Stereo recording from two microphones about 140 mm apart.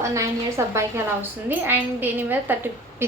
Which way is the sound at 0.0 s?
20° right (ahead or behind).